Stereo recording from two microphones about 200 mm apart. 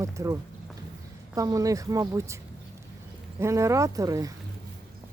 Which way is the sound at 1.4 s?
15° right (ahead or behind).